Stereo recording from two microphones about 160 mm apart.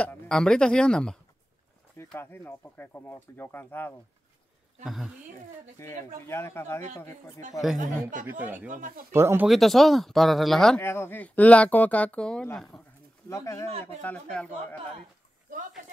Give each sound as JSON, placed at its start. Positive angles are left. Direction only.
{"t": 0.0, "sound": "speech", "side_deg": 5}
{"t": 2.1, "sound": "speech", "side_deg": 15}
{"t": 4.8, "sound": "speech", "side_deg": 0}
{"t": 5.8, "sound": "speech", "side_deg": 15}
{"t": 7.8, "sound": "speech", "side_deg": -55}
{"t": 8.3, "sound": "speech", "side_deg": -10}
{"t": 8.7, "sound": "speech", "side_deg": -55}
{"t": 9.1, "sound": "speech", "side_deg": -15}
{"t": 9.5, "sound": "speech", "side_deg": 0}
{"t": 10.8, "sound": "speech", "side_deg": 15}
{"t": 13.3, "sound": "speech", "side_deg": 20}
{"t": 13.8, "sound": "speech", "side_deg": 10}